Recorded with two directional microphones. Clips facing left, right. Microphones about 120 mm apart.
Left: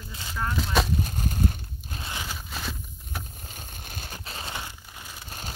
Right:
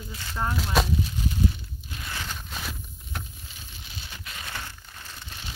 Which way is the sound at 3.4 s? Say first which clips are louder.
Left 4 dB; 50° left (ahead or behind).